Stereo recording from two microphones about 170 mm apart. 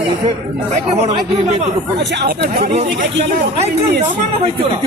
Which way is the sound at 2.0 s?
90° right.